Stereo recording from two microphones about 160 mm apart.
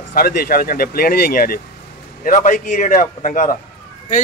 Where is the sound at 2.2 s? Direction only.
55° left (ahead or behind).